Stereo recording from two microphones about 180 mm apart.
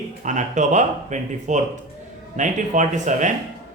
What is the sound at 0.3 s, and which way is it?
Speech, 40° right (ahead or behind).